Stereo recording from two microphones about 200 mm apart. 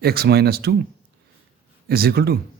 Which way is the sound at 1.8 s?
50° right (ahead or behind).